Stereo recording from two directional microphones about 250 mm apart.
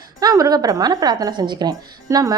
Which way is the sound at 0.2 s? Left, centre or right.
Centre.